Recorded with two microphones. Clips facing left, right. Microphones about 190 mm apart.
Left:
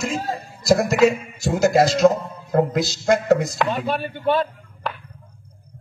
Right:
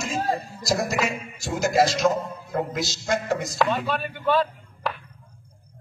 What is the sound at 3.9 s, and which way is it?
Speech, 25° left (ahead or behind).